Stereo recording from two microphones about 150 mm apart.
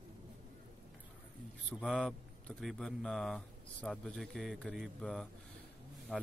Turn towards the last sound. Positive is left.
turn(degrees=-5)  # may be behind; listen again after turning